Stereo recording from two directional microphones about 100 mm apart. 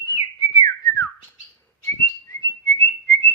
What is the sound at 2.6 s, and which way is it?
Whistling, 25° left (ahead or behind).